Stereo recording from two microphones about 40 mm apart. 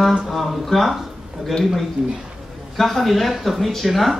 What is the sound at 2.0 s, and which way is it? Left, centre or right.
Speech, right.